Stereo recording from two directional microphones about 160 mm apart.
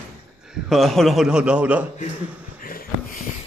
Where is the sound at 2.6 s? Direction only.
65° left (ahead or behind).